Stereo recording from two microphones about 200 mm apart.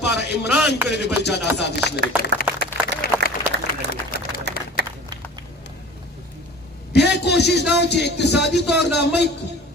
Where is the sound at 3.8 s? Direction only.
60° right (ahead or behind).